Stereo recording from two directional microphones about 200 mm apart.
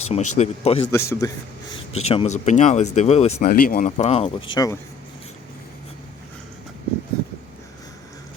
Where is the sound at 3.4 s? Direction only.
45° left (ahead or behind).